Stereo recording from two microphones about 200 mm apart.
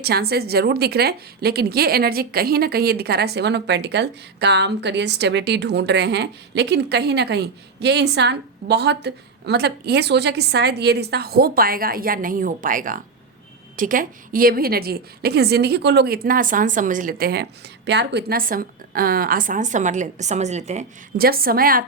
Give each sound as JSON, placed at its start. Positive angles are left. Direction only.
{"t": 0.0, "sound": "a woman's voice", "side_deg": -50}
{"t": 21.2, "sound": "a woman's voice", "side_deg": -50}